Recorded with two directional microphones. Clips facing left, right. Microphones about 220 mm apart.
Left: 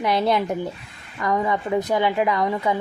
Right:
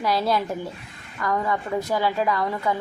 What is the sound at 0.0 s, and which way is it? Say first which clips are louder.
A woman's voice: left 2 dB; 20° left (ahead or behind).